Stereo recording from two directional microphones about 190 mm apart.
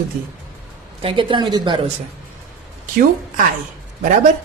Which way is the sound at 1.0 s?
25° right (ahead or behind).